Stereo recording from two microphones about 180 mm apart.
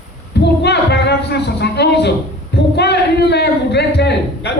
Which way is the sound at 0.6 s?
70° left (ahead or behind).